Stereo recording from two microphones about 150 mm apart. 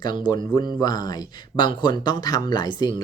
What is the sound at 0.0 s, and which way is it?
Speech, 30° left (ahead or behind).